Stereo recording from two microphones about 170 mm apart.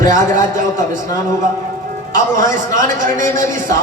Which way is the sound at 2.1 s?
50° right (ahead or behind).